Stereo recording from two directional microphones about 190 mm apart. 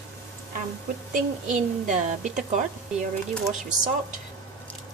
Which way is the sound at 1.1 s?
40° right (ahead or behind).